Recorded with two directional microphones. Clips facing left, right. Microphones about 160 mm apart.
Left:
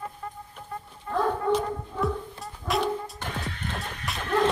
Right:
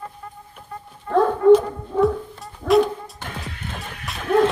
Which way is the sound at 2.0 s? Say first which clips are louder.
Right 11 dB; centre (ahead or behind).